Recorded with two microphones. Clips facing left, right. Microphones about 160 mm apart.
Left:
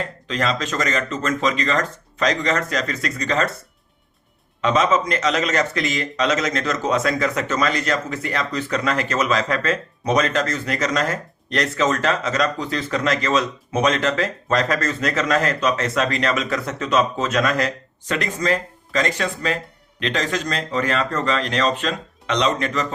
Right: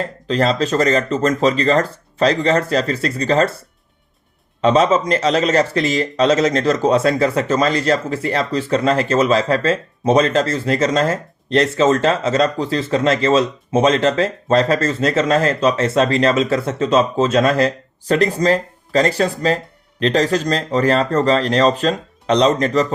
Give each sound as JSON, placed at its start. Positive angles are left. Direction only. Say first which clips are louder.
{"t": 0.0, "sound": "speech", "louder": "right 6 dB", "side_deg": -35}
{"t": 4.6, "sound": "speech", "louder": "right 5 dB", "side_deg": -30}